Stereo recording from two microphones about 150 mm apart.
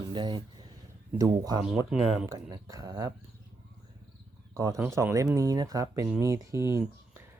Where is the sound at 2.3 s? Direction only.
25° right (ahead or behind).